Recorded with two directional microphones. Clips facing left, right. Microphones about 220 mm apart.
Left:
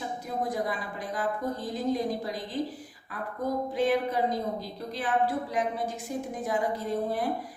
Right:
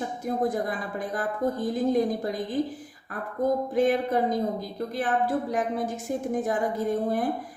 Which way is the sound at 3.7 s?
50° right (ahead or behind).